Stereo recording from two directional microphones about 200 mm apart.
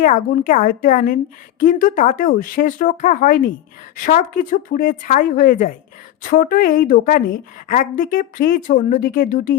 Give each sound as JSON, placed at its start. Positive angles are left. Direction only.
{"t": 0.0, "sound": "a woman's voice", "side_deg": 40}